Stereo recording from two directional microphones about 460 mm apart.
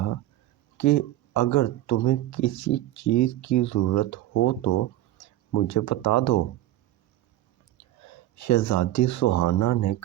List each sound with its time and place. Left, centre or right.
0.8 s speech: left
8.0 s speech: left